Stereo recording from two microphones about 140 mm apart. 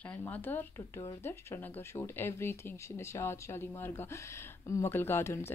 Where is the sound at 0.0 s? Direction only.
10° left (ahead or behind).